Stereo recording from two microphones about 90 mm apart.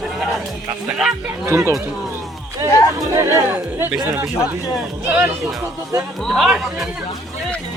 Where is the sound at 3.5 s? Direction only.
20° right (ahead or behind).